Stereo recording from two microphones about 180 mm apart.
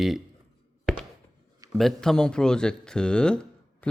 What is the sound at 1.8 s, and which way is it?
Speech, centre (ahead or behind).